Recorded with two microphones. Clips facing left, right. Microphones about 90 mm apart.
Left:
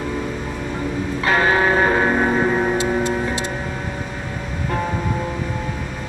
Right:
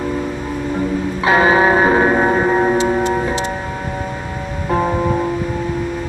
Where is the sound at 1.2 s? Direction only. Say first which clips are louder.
Right 5 dB; 15° right (ahead or behind).